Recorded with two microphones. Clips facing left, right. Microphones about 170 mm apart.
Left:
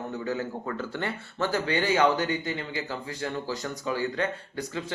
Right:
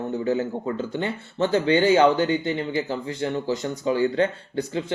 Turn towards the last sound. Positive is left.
turn(degrees=-30)  # may be behind; listen again after turning